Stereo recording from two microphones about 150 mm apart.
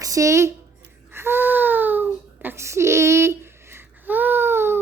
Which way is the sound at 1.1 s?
15° right (ahead or behind).